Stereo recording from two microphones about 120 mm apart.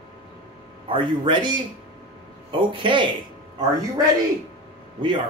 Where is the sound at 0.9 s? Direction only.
40° right (ahead or behind).